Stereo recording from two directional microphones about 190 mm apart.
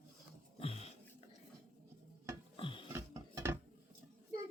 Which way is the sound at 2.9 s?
15° right (ahead or behind).